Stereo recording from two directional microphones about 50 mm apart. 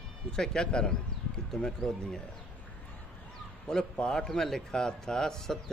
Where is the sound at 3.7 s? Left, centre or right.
Centre.